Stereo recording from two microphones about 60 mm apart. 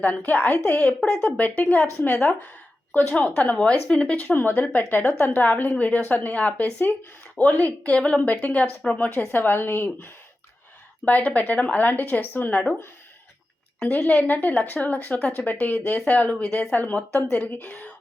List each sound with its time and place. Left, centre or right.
0.3 s speech: left
4.3 s a woman's voice: left
13.8 s speech: left